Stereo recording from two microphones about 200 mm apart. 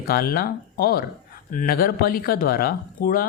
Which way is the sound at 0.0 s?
50° left (ahead or behind).